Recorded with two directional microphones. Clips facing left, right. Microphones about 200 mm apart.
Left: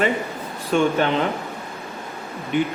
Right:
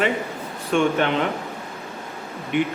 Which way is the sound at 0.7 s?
35° left (ahead or behind).